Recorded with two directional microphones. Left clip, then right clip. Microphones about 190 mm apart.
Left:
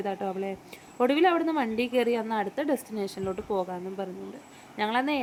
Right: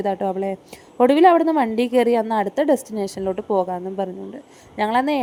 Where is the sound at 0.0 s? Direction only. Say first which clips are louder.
Right 9 dB; 30° right (ahead or behind).